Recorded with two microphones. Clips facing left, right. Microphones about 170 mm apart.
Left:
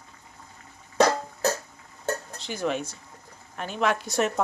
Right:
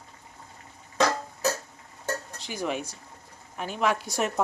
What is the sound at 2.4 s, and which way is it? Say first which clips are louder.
A woman's voice: left 2 dB; 10° right (ahead or behind).